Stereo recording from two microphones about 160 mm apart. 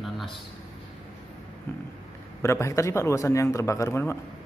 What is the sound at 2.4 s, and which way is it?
A man's voice, 20° left (ahead or behind).